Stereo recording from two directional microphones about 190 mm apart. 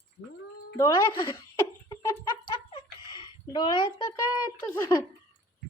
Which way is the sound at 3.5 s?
25° left (ahead or behind).